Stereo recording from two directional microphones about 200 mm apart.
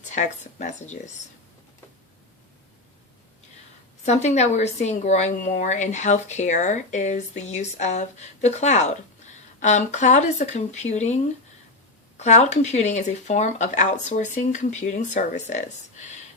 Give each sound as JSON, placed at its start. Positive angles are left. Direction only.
{"t": 0.0, "sound": "a woman's voice", "side_deg": 35}
{"t": 4.0, "sound": "a woman's voice", "side_deg": 35}